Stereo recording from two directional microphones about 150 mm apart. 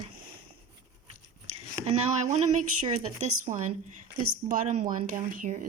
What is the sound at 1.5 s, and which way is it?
Speech, 45° right (ahead or behind).